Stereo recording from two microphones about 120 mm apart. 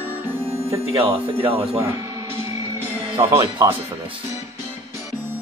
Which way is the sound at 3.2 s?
40° right (ahead or behind).